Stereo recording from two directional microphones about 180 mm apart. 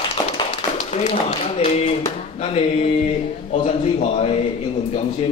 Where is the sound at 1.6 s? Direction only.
35° left (ahead or behind).